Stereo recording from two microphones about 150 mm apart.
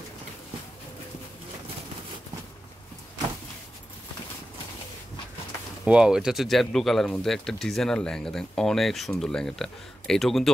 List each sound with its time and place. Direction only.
5.9 s speech: 5° right (ahead or behind)